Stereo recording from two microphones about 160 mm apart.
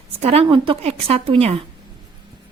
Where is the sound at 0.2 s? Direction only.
40° right (ahead or behind).